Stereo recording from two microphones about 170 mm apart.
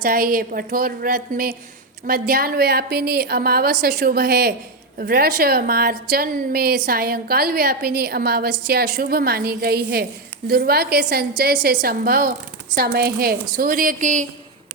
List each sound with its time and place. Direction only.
0.0 s a woman's voice: 60° right (ahead or behind)